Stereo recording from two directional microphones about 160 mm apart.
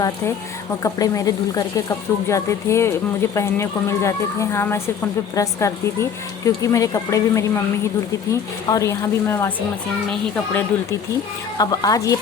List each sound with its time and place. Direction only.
0.8 s speech: 20° left (ahead or behind)
11.5 s speech: 25° left (ahead or behind)